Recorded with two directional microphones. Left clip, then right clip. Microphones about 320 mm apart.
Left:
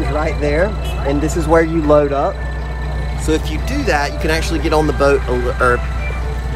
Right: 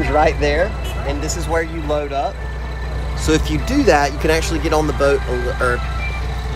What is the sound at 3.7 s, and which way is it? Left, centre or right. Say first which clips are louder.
Speech: right 3 dB; centre.